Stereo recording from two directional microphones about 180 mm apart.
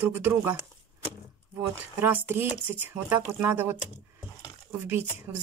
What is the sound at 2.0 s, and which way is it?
Speech, 10° right (ahead or behind).